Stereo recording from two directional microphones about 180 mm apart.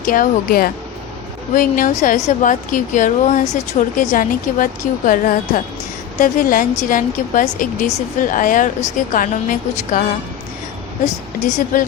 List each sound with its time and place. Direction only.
0.0 s a woman's voice: 50° left (ahead or behind)
11.0 s a woman's voice: 45° left (ahead or behind)